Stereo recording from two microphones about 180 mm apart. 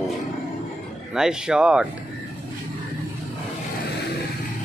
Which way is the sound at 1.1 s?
5° right (ahead or behind).